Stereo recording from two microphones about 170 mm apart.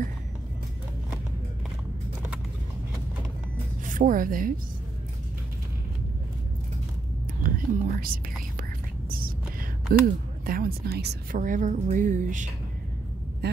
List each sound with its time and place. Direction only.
3.8 s a woman's voice: 50° right (ahead or behind)
7.4 s whispering: 55° right (ahead or behind)
9.9 s speech: 60° right (ahead or behind)
11.4 s speech: 50° right (ahead or behind)